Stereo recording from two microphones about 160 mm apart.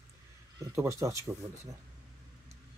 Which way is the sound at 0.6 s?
20° right (ahead or behind).